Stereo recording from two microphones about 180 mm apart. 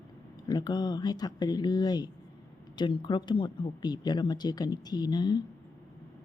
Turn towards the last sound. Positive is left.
turn(degrees=25)  # may be behind; listen again after turning